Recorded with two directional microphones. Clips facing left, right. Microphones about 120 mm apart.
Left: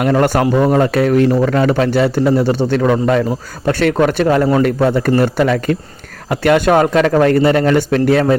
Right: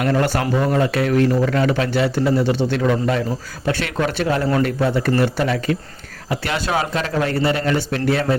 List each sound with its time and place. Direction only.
0.0 s a man's voice: 45° left (ahead or behind)